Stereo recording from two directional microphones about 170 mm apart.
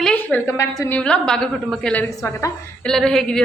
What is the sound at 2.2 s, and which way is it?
Speech, 15° left (ahead or behind).